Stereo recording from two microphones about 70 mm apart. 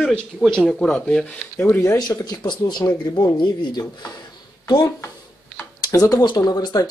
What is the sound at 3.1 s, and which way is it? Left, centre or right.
Speech, left.